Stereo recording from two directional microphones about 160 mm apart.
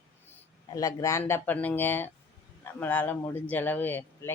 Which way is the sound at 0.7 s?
20° left (ahead or behind).